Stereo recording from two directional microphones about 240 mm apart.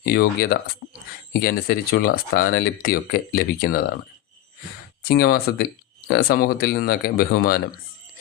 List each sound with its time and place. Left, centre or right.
0.0 s speech: left
5.0 s speech: left